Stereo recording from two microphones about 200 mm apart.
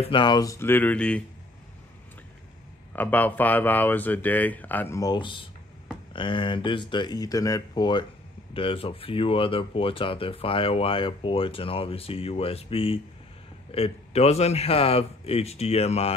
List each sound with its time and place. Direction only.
0.0 s speech: 25° left (ahead or behind); by 1.2 s 5° left (ahead or behind)
3.0 s speech: 10° left (ahead or behind); by 16.1 s 30° left (ahead or behind)